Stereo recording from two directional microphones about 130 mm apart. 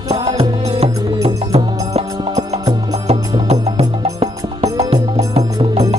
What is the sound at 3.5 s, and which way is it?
Music, 55° right (ahead or behind).